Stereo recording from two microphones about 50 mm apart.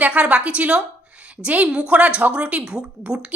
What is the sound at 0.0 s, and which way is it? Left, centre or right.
A woman's voice, right.